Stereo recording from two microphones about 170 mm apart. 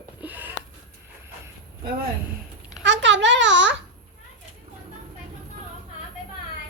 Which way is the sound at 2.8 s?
90° right.